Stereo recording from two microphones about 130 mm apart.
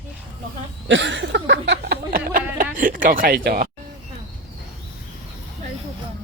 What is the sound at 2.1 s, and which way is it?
Speech, 90° right.